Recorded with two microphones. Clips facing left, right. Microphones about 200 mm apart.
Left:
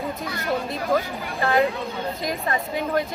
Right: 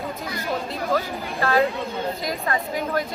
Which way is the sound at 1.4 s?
15° left (ahead or behind).